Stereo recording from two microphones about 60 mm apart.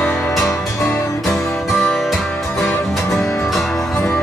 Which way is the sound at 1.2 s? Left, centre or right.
Centre.